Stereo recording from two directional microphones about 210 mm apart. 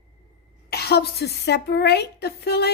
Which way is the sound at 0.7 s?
50° left (ahead or behind).